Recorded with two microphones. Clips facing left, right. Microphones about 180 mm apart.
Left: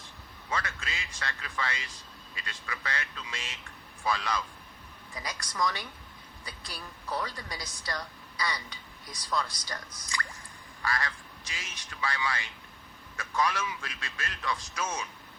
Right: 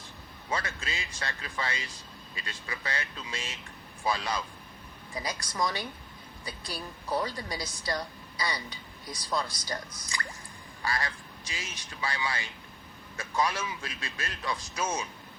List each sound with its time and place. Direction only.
0.5 s a man's voice: 30° right (ahead or behind)